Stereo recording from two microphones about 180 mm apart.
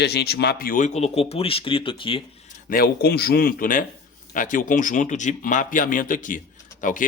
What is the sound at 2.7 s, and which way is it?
A man's voice, 60° left (ahead or behind).